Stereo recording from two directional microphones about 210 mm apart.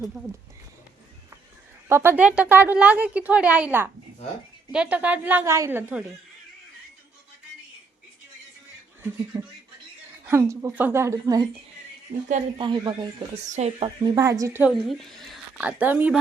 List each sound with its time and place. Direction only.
1.9 s a woman's voice: 10° right (ahead or behind)
9.3 s a woman's voice: 10° right (ahead or behind)
13.5 s a woman's voice: 30° right (ahead or behind)
14.2 s a woman's voice: 15° right (ahead or behind)
14.7 s a woman's voice: centre (ahead or behind)